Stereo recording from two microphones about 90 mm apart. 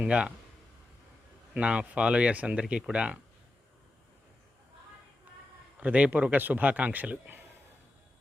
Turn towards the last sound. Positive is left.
turn(degrees=-20)  # may be behind; listen again after turning